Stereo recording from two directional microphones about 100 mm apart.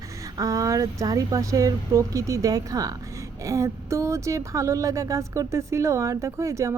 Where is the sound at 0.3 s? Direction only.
35° right (ahead or behind).